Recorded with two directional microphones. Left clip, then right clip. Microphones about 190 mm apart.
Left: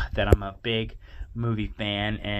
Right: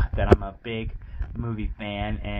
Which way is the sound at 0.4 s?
20° left (ahead or behind).